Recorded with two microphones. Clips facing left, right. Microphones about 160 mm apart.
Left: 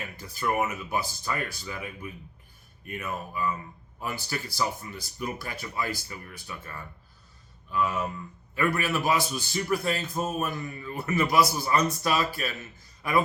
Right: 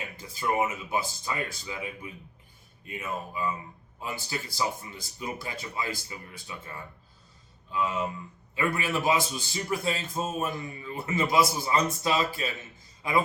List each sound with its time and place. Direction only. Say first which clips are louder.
0.2 s a man's voice: even; 20° right (ahead or behind)